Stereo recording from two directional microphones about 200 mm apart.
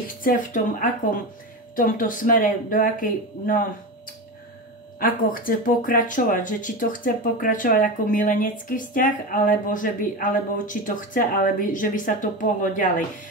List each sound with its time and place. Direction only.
0.1 s speech: 45° left (ahead or behind)
4.9 s speech: 45° left (ahead or behind)